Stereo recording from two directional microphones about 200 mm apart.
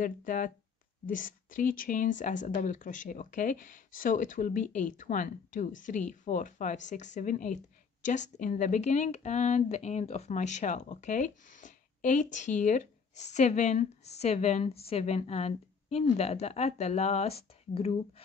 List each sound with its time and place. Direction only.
0.0 s speech: 40° left (ahead or behind)